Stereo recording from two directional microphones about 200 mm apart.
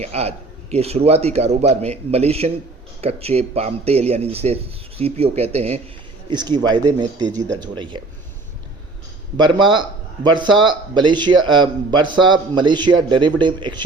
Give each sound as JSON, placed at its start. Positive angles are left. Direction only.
{"t": 0.0, "sound": "speech", "side_deg": -30}
{"t": 6.2, "sound": "speech", "side_deg": -20}
{"t": 9.4, "sound": "speech", "side_deg": -25}